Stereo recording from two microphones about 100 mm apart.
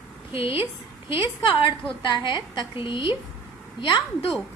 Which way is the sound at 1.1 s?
60° left (ahead or behind).